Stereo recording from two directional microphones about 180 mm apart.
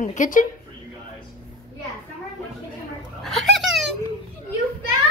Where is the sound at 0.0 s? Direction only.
45° left (ahead or behind).